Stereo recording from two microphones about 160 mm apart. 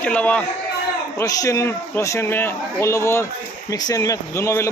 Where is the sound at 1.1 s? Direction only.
20° left (ahead or behind).